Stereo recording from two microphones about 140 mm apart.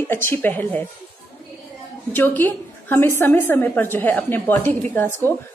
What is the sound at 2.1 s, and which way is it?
A woman's voice, 15° left (ahead or behind).